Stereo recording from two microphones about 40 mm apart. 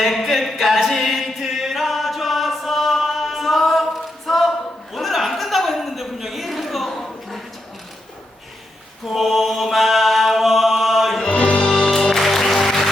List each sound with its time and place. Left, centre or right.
0.0 s music: centre
4.9 s a sound: centre
9.0 s mantra: centre
11.3 s music: left
11.9 s music: centre